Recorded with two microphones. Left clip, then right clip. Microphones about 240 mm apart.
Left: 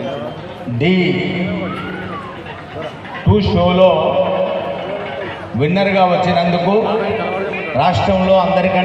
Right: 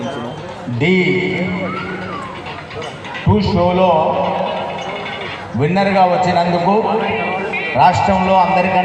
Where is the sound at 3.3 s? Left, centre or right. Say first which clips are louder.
Left 2 dB; left.